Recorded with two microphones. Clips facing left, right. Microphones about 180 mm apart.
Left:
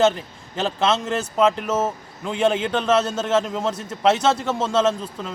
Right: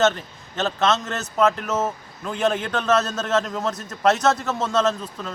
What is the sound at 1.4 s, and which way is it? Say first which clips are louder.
Speech: left 1 dB; 10° left (ahead or behind).